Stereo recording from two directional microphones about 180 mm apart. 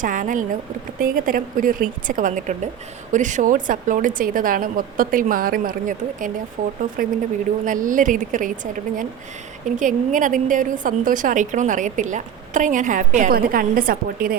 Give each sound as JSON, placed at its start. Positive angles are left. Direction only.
{"t": 0.0, "sound": "a woman's voice", "side_deg": -45}